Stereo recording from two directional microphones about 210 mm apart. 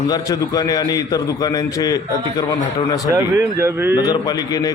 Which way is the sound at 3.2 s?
10° right (ahead or behind).